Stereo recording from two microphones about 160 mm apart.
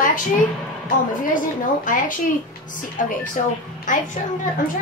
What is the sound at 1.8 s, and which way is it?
A woman's voice, 55° left (ahead or behind).